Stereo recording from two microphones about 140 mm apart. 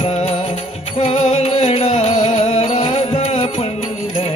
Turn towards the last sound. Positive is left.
turn(degrees=45)  # may be behind; listen again after turning